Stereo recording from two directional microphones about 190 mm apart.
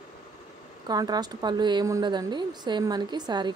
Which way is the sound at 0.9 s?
20° right (ahead or behind).